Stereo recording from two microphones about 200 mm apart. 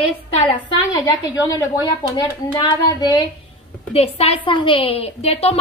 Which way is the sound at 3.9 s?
30° left (ahead or behind).